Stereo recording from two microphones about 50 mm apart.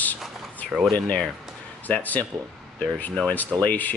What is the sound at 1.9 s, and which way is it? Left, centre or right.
Speech, left.